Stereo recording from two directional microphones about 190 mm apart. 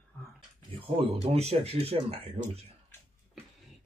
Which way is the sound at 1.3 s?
35° right (ahead or behind).